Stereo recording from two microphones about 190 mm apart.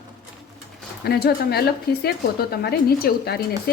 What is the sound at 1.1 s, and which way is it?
Speech, 55° left (ahead or behind).